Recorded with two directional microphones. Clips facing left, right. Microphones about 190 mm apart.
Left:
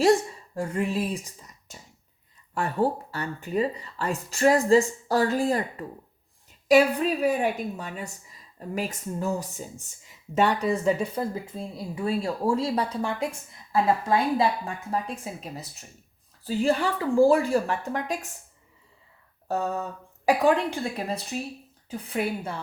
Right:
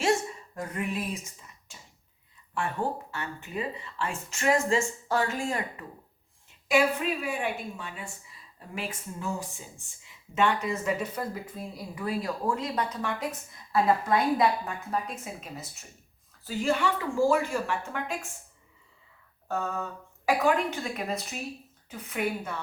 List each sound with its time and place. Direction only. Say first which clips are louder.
0.0 s a woman's voice: left 6 dB; 30° left (ahead or behind)
19.5 s a sound: left 4 dB; 40° left (ahead or behind)
20.2 s a woman's voice: left 4 dB; 35° left (ahead or behind)